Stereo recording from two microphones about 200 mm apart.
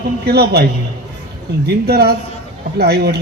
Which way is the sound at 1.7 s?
50° right (ahead or behind).